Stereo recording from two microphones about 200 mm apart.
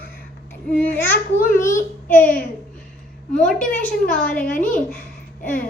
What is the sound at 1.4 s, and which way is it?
Babbling, 40° left (ahead or behind).